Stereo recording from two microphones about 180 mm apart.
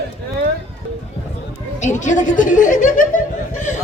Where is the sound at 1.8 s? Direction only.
40° left (ahead or behind).